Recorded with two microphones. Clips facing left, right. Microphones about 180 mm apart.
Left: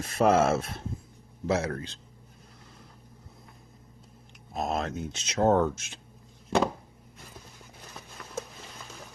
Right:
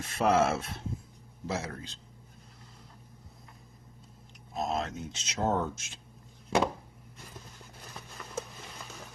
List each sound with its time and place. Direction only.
0.0 s speech: 45° left (ahead or behind)
1.5 s speech: 65° left (ahead or behind)
4.5 s speech: 60° left (ahead or behind)
7.6 s a sound: centre (ahead or behind)